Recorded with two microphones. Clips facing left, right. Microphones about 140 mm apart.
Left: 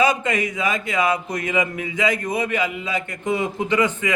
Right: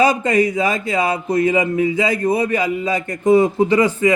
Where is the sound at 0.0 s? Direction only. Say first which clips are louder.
Right 5 dB; 35° right (ahead or behind).